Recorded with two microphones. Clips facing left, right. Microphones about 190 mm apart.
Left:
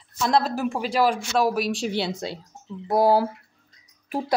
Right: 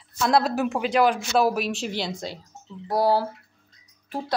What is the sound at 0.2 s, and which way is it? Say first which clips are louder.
A woman's voice: right 1 dB; centre (ahead or behind).